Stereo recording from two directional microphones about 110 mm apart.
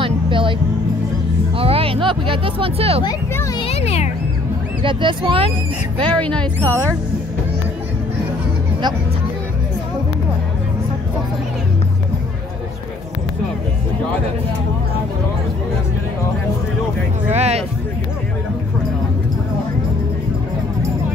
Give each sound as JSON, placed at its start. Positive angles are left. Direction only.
{"t": 0.0, "sound": "music", "side_deg": -50}
{"t": 1.6, "sound": "speech", "side_deg": -60}
{"t": 3.5, "sound": "a child's voice", "side_deg": 65}
{"t": 4.8, "sound": "speech", "side_deg": -50}
{"t": 6.0, "sound": "speech", "side_deg": 10}
{"t": 6.6, "sound": "speech", "side_deg": -25}
{"t": 17.3, "sound": "speech", "side_deg": -75}